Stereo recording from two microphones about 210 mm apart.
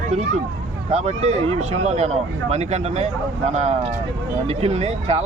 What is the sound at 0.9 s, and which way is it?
Speech, 30° right (ahead or behind).